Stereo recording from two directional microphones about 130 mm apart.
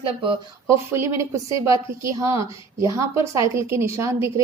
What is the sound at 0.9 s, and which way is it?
Speech, 20° right (ahead or behind).